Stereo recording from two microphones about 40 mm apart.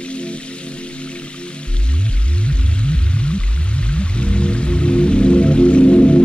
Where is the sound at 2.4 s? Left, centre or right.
Left.